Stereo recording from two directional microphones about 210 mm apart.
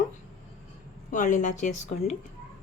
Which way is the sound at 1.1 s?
35° left (ahead or behind).